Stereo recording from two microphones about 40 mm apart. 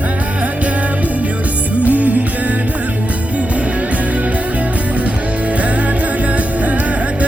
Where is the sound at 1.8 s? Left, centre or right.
Right.